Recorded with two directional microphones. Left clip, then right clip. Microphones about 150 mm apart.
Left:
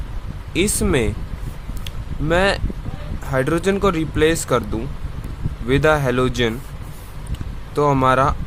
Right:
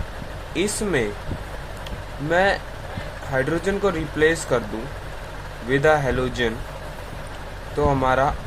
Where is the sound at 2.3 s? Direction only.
60° left (ahead or behind).